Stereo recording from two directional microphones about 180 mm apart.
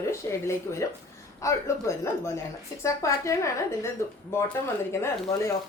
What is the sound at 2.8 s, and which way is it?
A woman's voice, 15° left (ahead or behind).